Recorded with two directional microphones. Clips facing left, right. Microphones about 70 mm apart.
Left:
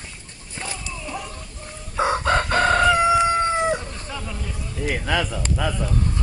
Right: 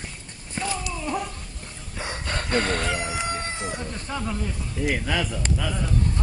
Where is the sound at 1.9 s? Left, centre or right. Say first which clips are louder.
Left 11 dB; left.